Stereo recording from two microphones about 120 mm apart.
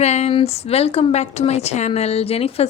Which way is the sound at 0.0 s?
65° left (ahead or behind).